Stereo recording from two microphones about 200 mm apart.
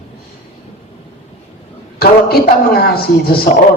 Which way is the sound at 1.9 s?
50° left (ahead or behind).